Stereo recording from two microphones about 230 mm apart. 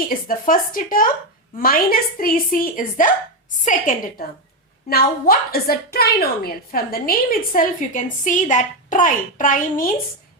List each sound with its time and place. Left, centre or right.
0.1 s a woman's voice: left